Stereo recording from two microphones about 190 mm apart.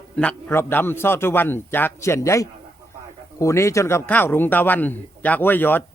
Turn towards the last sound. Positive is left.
turn(degrees=10)  # may be behind; listen again after turning